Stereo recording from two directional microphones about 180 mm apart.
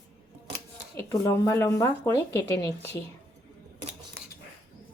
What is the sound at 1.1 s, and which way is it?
Speech, 15° left (ahead or behind).